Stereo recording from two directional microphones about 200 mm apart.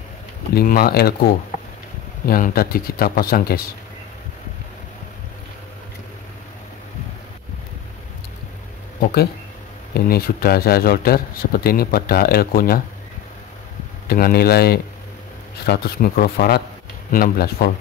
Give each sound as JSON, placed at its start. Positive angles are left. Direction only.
{"t": 0.6, "sound": "a man's voice", "side_deg": 50}
{"t": 9.9, "sound": "a man's voice", "side_deg": 50}
{"t": 14.0, "sound": "a man's voice", "side_deg": 50}